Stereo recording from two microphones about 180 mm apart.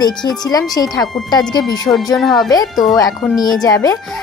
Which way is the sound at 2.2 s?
Centre (ahead or behind).